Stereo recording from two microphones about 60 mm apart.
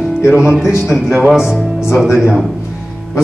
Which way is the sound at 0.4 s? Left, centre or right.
Centre.